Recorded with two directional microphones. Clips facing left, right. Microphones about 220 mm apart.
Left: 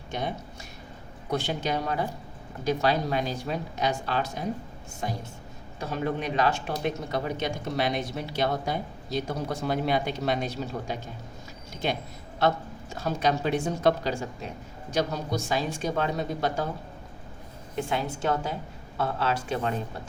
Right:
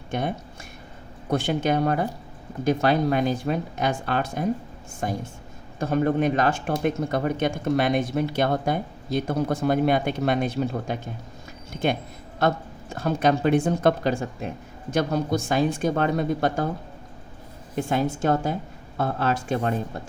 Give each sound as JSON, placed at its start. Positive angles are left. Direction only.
{"t": 1.3, "sound": "speech", "side_deg": -50}
{"t": 17.7, "sound": "speech", "side_deg": -45}